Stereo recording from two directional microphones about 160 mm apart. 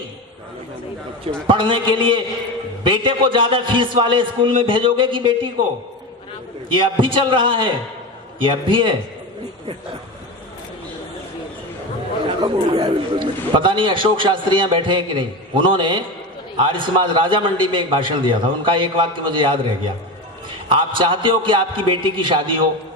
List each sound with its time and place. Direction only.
1.5 s a man's voice: 30° right (ahead or behind)
6.7 s a man's voice: 30° right (ahead or behind)
12.4 s a man's voice: 30° right (ahead or behind)